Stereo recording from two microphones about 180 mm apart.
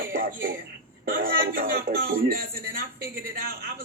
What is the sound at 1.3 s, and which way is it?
Speech, 60° right (ahead or behind).